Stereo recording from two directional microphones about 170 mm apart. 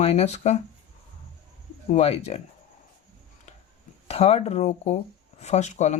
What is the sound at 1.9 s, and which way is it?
Speech, 40° left (ahead or behind).